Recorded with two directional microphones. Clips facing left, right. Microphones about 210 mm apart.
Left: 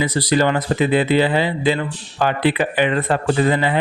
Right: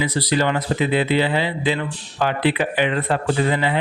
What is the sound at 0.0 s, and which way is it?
Speech, 45° left (ahead or behind).